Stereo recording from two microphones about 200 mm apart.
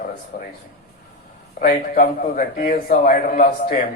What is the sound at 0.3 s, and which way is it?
Speech, 45° left (ahead or behind).